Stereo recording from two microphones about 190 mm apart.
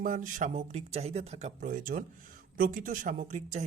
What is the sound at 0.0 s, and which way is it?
Speech, 45° right (ahead or behind).